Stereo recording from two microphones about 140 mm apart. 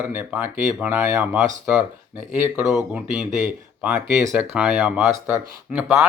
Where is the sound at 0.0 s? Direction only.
10° right (ahead or behind).